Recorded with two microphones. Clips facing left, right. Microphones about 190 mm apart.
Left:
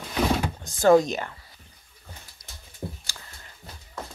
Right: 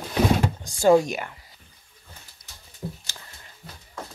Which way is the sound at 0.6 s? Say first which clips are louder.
Left 1 dB; 15° right (ahead or behind).